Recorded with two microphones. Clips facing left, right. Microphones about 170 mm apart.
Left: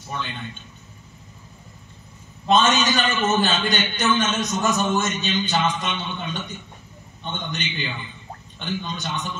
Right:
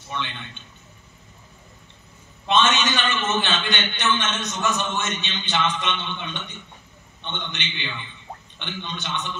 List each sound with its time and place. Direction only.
2.4 s a man's voice: 40° left (ahead or behind)